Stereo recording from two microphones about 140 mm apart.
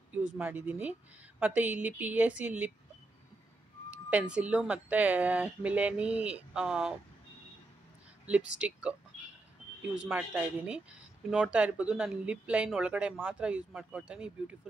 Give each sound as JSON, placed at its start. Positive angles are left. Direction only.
{"t": 0.1, "sound": "speech", "side_deg": -10}
{"t": 3.9, "sound": "speech", "side_deg": -10}
{"t": 8.5, "sound": "speech", "side_deg": -10}